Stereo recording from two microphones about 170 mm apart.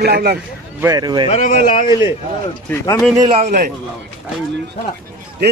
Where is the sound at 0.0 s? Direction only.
70° right (ahead or behind).